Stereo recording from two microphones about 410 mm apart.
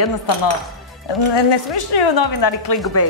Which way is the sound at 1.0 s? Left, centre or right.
Left.